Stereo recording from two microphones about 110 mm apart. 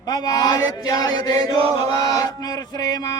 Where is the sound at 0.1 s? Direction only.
35° left (ahead or behind).